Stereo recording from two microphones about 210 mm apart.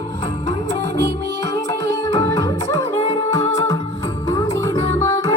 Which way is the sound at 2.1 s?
15° left (ahead or behind).